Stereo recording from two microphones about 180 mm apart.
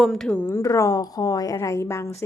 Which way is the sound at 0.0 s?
Centre (ahead or behind).